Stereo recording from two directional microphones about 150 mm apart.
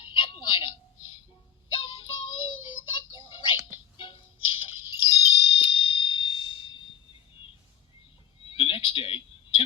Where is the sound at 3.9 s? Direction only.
35° left (ahead or behind).